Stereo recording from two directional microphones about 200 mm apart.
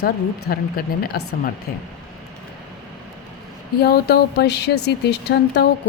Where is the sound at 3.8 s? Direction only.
55° left (ahead or behind).